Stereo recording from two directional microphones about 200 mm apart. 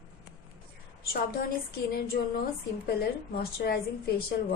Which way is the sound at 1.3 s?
50° left (ahead or behind).